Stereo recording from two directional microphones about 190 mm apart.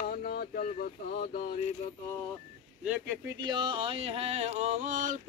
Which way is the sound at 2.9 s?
5° right (ahead or behind).